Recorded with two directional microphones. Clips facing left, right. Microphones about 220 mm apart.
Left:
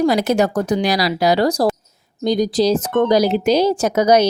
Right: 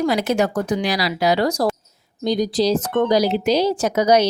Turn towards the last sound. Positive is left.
turn(degrees=45)  # may be behind; listen again after turning